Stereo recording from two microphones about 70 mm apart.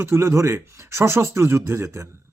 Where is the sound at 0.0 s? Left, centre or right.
Right.